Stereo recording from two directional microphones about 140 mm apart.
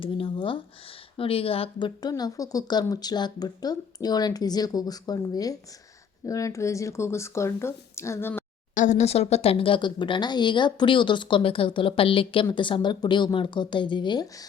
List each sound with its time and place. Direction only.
0.0 s speech: 40° left (ahead or behind)
2.0 s speech: 30° left (ahead or behind)
8.7 s speech: 60° left (ahead or behind); by 14.3 s 35° left (ahead or behind)